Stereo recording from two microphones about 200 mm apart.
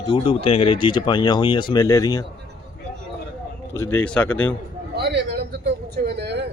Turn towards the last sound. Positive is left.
turn(degrees=-60)  # may be behind; listen again after turning